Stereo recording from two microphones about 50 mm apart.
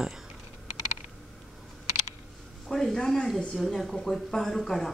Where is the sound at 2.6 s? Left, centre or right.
Centre.